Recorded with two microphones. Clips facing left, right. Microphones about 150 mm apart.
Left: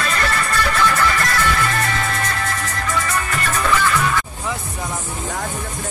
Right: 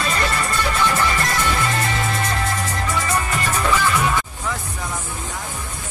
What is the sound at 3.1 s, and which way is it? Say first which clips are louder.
Music: right 1 dB; 15° right (ahead or behind).